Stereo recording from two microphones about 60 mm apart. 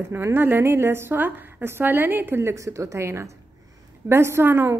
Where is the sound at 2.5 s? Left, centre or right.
Right.